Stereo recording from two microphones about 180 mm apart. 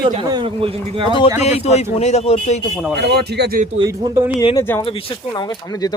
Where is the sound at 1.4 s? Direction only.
35° left (ahead or behind).